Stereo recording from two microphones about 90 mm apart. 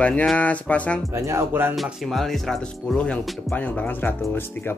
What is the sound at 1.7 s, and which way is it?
Speech, centre (ahead or behind).